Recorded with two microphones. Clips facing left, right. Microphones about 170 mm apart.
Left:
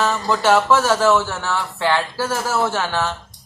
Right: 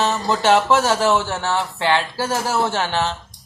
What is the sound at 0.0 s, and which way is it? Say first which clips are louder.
Speech: even; 20° right (ahead or behind).